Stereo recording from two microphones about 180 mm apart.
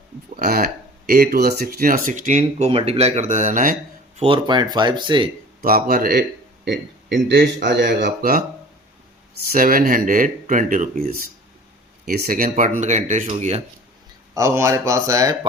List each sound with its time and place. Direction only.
0.3 s speech: 55° right (ahead or behind)
4.2 s speech: 25° right (ahead or behind)
5.9 s a man's voice: 55° right (ahead or behind)
6.7 s speech: 70° right (ahead or behind)
9.5 s speech: 50° right (ahead or behind)
12.0 s speech: 55° right (ahead or behind); by 13.6 s 40° right (ahead or behind)
14.3 s speech: 15° right (ahead or behind)